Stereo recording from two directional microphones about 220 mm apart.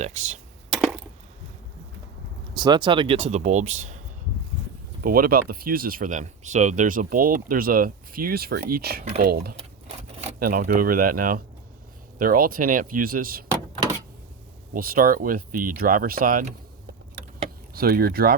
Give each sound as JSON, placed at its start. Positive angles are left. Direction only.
{"t": 0.0, "sound": "speech", "side_deg": -30}
{"t": 0.7, "sound": "a sound", "side_deg": 0}
{"t": 2.6, "sound": "speech", "side_deg": -20}
{"t": 5.0, "sound": "speech", "side_deg": -40}
{"t": 14.7, "sound": "speech", "side_deg": -40}
{"t": 17.7, "sound": "speech", "side_deg": -45}